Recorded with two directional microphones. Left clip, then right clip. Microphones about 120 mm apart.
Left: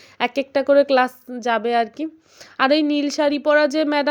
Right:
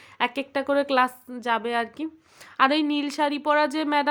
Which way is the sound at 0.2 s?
30° left (ahead or behind).